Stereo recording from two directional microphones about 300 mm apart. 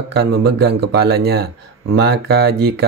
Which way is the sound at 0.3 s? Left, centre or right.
Right.